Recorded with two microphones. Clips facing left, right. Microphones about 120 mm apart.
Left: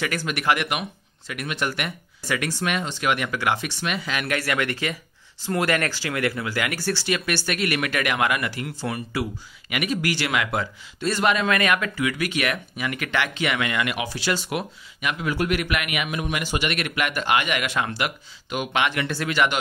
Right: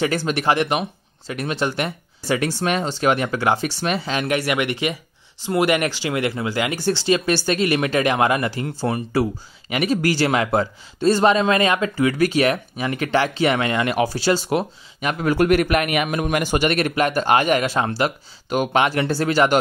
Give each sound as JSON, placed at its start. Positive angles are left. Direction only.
{"t": 0.0, "sound": "speech", "side_deg": -30}